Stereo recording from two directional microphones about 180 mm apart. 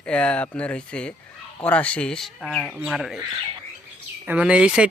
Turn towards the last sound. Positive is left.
turn(degrees=-5)  # may be behind; listen again after turning